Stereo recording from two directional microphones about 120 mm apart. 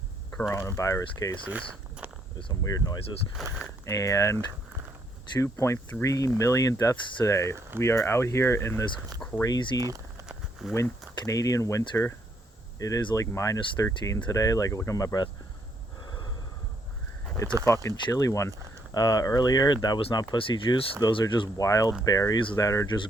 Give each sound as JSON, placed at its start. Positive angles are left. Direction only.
{"t": 0.3, "sound": "a sound", "side_deg": 10}
{"t": 0.5, "sound": "speech", "side_deg": 25}
{"t": 1.5, "sound": "speech", "side_deg": -10}
{"t": 2.5, "sound": "speech", "side_deg": 30}
{"t": 3.4, "sound": "speech", "side_deg": 0}
{"t": 3.8, "sound": "speech", "side_deg": 25}
{"t": 9.8, "sound": "a sound", "side_deg": -30}
{"t": 10.2, "sound": "a sound", "side_deg": 0}
{"t": 11.3, "sound": "speech", "side_deg": 30}
{"t": 16.0, "sound": "snort", "side_deg": 35}
{"t": 17.8, "sound": "speech", "side_deg": 30}
{"t": 21.6, "sound": "speech", "side_deg": 30}